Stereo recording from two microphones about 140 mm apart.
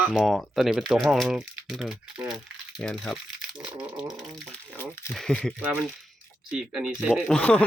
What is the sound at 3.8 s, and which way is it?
Speech, 30° right (ahead or behind).